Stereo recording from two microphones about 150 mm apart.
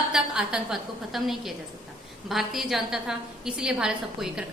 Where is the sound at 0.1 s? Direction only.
5° right (ahead or behind).